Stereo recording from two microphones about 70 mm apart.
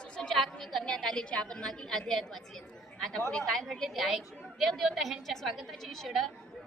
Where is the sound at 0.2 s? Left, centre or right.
Centre.